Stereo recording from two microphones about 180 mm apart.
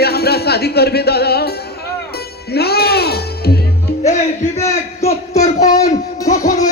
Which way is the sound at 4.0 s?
40° left (ahead or behind).